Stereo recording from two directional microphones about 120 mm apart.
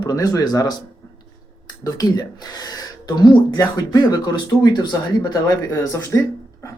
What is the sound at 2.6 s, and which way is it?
Speech, 35° left (ahead or behind).